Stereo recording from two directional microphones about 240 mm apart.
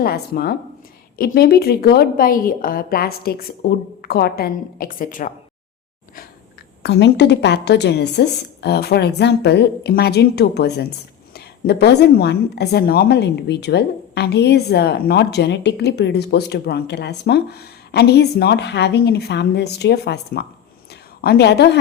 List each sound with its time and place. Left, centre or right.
0.0 s a woman's voice: left
6.8 s a woman's voice: left
20.9 s a sound: left